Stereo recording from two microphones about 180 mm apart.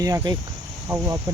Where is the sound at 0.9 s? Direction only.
20° right (ahead or behind).